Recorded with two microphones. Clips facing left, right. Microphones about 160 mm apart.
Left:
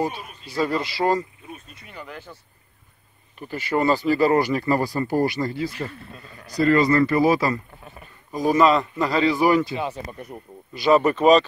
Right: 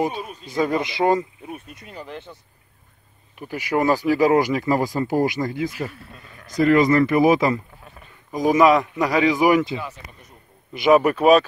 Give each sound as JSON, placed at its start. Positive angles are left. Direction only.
{"t": 0.0, "sound": "speech", "side_deg": -15}
{"t": 3.3, "sound": "speech", "side_deg": -15}
{"t": 5.8, "sound": "speech", "side_deg": -5}
{"t": 6.5, "sound": "speech", "side_deg": -15}
{"t": 9.8, "sound": "speech", "side_deg": 30}
{"t": 10.7, "sound": "speech", "side_deg": -15}